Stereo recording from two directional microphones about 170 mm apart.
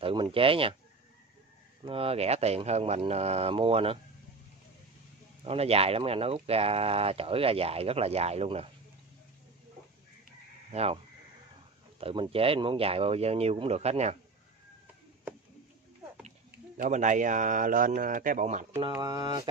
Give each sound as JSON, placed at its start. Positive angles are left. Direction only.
{"t": 0.0, "sound": "speech", "side_deg": -30}
{"t": 1.9, "sound": "speech", "side_deg": -35}
{"t": 5.4, "sound": "speech", "side_deg": -35}
{"t": 10.7, "sound": "speech", "side_deg": -35}
{"t": 12.0, "sound": "speech", "side_deg": -35}
{"t": 16.3, "sound": "speech", "side_deg": -50}
{"t": 18.8, "sound": "speech", "side_deg": -25}